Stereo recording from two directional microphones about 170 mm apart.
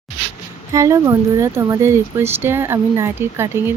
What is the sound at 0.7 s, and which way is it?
Speech, 20° right (ahead or behind).